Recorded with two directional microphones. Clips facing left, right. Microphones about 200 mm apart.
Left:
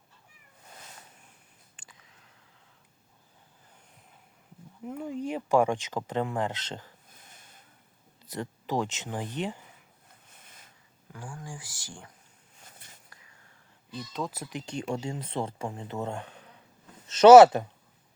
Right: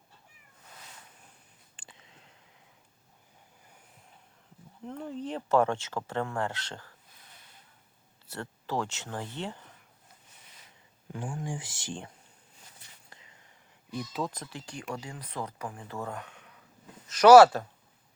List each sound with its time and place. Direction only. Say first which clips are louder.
1.7 s a sound: right 5 dB; 25° right (ahead or behind)
4.9 s speech: left 3 dB; 10° left (ahead or behind)
7.1 s snort: left 2 dB; 50° left (ahead or behind)
8.3 s speech: left 3 dB; 15° left (ahead or behind)
10.4 s a sound: left 3 dB; 50° left (ahead or behind)
11.1 s speech: right 6 dB; 20° right (ahead or behind)
13.1 s whispering: right 2 dB; 25° right (ahead or behind)
13.9 s speech: right 1 dB; 5° right (ahead or behind); by 17.7 s 20° left (ahead or behind)